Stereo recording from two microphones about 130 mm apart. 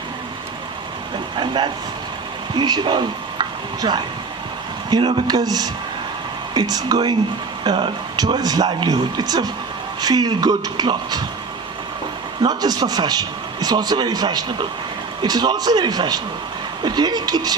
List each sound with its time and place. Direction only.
1.4 s a man's voice: 40° right (ahead or behind)
12.4 s a man's voice: 30° right (ahead or behind)